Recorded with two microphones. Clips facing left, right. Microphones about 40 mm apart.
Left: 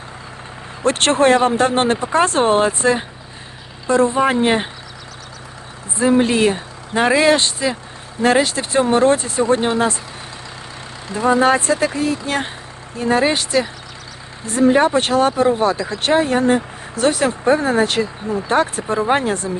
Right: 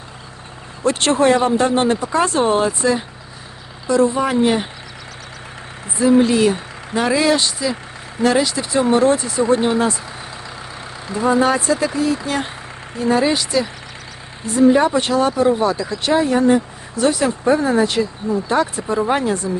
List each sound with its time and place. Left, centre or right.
0.8 s speech: left
6.0 s speech: left
11.2 s speech: left